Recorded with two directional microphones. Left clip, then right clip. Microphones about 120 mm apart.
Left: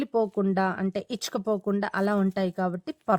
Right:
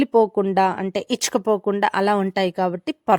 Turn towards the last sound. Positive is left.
turn(degrees=-40)  # may be behind; listen again after turning